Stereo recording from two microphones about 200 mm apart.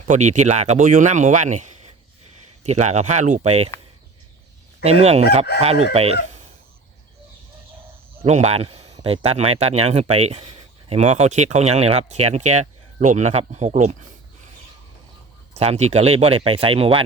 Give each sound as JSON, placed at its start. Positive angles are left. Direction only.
{"t": 0.0, "sound": "speech", "side_deg": -35}
{"t": 4.8, "sound": "speech", "side_deg": -30}
{"t": 8.2, "sound": "speech", "side_deg": -30}
{"t": 15.5, "sound": "speech", "side_deg": -35}